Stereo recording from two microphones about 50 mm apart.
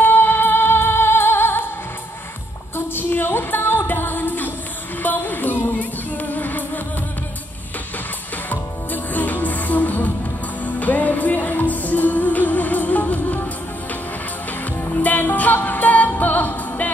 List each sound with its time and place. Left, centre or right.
0.0 s music: left
2.9 s music: left
8.5 s music: left
14.9 s music: left